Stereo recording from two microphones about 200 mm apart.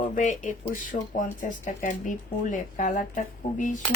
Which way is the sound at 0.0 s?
40° left (ahead or behind).